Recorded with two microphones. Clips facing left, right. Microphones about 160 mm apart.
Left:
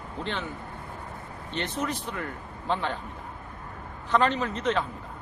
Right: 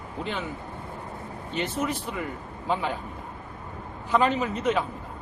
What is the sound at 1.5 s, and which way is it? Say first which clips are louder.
Speech: right 2 dB; 5° right (ahead or behind).